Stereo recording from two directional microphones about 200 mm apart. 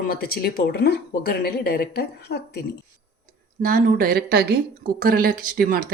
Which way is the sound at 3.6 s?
40° right (ahead or behind).